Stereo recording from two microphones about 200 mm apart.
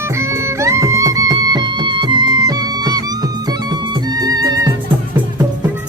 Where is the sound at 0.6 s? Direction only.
15° right (ahead or behind).